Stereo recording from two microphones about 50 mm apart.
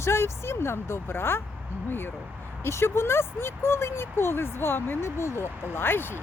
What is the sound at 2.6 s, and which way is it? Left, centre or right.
Speech, left.